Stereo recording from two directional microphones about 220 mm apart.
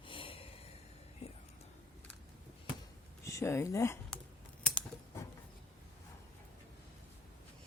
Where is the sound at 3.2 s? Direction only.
15° left (ahead or behind).